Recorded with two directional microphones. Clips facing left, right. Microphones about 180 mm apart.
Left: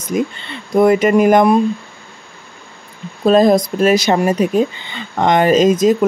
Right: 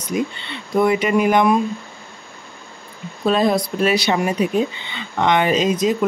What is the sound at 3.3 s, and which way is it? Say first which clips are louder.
Speech: left 6 dB; 40° left (ahead or behind).